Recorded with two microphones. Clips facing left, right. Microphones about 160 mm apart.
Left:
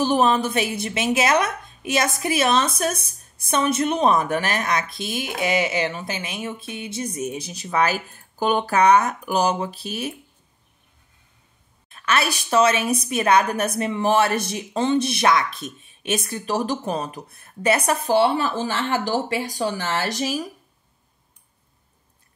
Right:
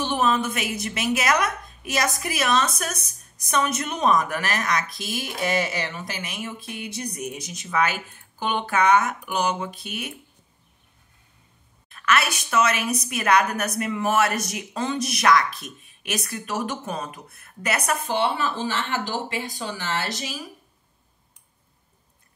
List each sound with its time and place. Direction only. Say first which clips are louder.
0.0 s a woman's voice: left 4 dB; 35° left (ahead or behind)
11.9 s a woman's voice: even; 30° left (ahead or behind)